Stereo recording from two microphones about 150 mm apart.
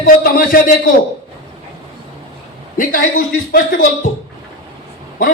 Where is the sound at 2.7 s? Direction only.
65° left (ahead or behind).